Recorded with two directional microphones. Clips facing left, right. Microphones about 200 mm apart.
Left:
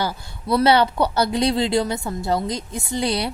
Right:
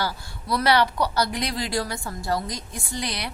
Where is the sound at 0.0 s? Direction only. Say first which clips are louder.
Left 4 dB; 20° left (ahead or behind).